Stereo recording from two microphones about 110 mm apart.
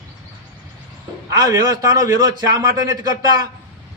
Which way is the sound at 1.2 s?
30° right (ahead or behind).